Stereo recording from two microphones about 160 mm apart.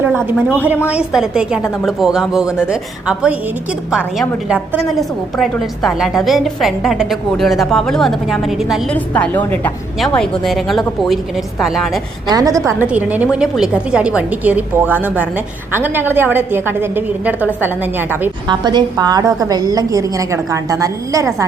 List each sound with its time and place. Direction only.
0.3 s a woman's voice: 10° right (ahead or behind)
9.1 s a woman's voice: 10° left (ahead or behind)
12.3 s a woman's voice: 20° right (ahead or behind)
12.9 s a woman's voice: 10° right (ahead or behind)
18.4 s a woman's voice: 25° right (ahead or behind)